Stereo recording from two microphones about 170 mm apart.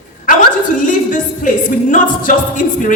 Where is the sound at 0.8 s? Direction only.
50° left (ahead or behind).